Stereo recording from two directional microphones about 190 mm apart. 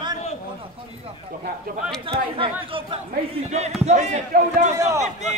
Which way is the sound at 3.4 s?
35° right (ahead or behind).